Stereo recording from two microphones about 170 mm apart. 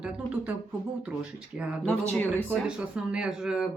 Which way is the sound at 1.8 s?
10° left (ahead or behind).